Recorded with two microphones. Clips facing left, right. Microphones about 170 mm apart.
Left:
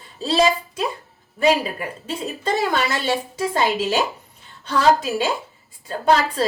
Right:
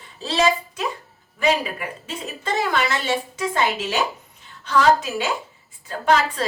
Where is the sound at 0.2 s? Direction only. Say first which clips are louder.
Left 2 dB; 30° left (ahead or behind).